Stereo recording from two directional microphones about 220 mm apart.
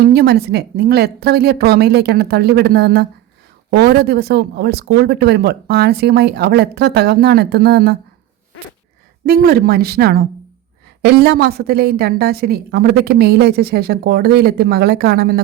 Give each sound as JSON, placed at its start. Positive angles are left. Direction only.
{"t": 0.0, "sound": "a woman's voice", "side_deg": -45}
{"t": 9.2, "sound": "a woman's voice", "side_deg": -45}